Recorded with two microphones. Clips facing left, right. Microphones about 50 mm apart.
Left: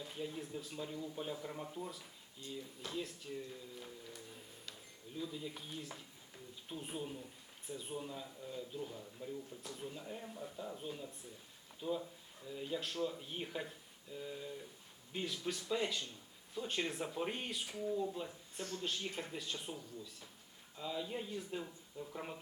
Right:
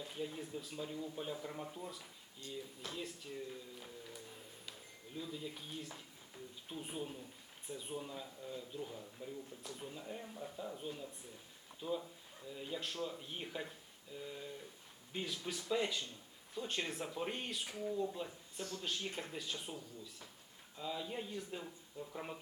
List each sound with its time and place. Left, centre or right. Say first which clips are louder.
0.0 s speech: even; centre
18.5 s speech: left 1 dB; left
18.8 s speech: left 1 dB; centre